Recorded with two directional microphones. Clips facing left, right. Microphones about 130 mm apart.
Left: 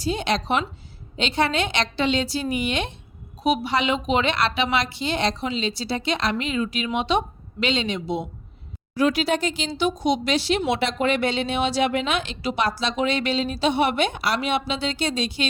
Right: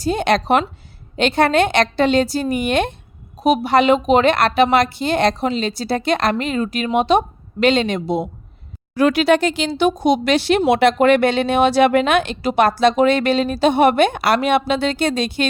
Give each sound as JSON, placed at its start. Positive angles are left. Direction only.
{"t": 0.0, "sound": "a woman's voice", "side_deg": -55}
{"t": 9.0, "sound": "speech", "side_deg": -65}